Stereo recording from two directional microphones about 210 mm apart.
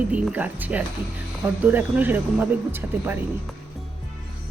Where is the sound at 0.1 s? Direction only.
5° right (ahead or behind).